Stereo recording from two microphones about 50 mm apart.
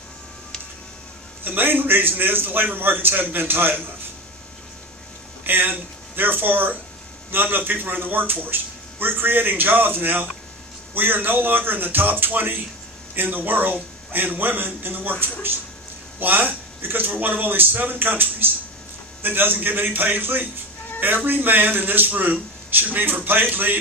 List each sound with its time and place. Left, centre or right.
1.5 s a man's voice: right
5.4 s a man's voice: right
16.2 s a man's voice: right